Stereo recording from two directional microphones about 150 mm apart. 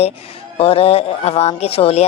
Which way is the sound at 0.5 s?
40° left (ahead or behind).